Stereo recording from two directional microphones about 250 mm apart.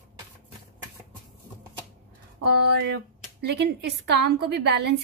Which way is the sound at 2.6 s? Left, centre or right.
Right.